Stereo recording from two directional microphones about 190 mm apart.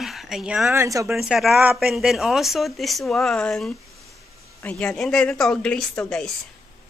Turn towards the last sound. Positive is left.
turn(degrees=5)  # may be behind; listen again after turning